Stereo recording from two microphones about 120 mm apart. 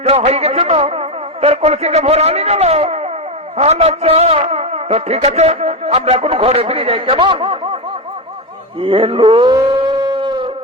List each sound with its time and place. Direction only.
0.0 s a man's voice: 55° right (ahead or behind)
8.8 s speech: 50° right (ahead or behind)
9.5 s a sound: 35° right (ahead or behind)